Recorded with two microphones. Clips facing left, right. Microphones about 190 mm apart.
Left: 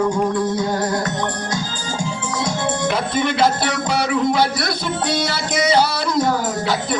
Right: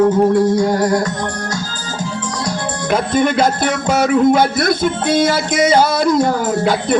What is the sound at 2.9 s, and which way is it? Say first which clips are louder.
Music: right 8 dB; 45° right (ahead or behind).